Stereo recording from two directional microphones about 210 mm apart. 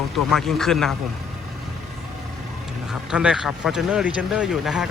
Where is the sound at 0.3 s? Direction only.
Centre (ahead or behind).